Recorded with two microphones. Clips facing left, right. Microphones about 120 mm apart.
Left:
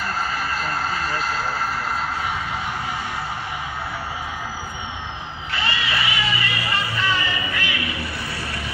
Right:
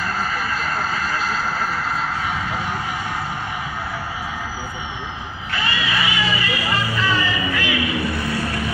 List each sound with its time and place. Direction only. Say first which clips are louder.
0.3 s vehicle: right 1 dB; 40° left (ahead or behind)
5.5 s music: right 2 dB; 30° left (ahead or behind)
7.8 s vehicle: right 6 dB; 20° right (ahead or behind)
8.1 s music: right 7 dB; 45° right (ahead or behind)